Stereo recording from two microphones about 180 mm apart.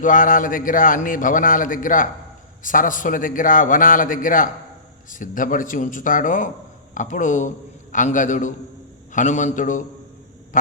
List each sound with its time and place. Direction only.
0.0 s a man's voice: 50° left (ahead or behind)